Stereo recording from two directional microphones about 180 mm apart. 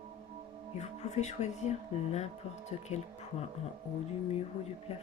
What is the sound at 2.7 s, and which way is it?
Speech, 35° left (ahead or behind).